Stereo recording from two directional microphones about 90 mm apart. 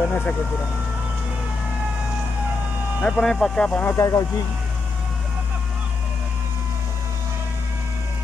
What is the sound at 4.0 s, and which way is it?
Speech, 40° left (ahead or behind).